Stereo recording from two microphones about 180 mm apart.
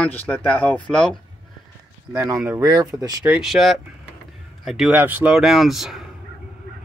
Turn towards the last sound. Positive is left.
turn(degrees=0)  # may be behind; listen again after turning